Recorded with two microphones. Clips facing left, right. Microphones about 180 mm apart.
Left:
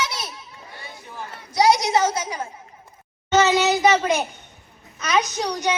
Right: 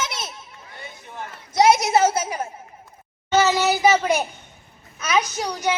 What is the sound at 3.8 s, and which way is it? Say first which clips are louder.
Child singing: even; 5° right (ahead or behind).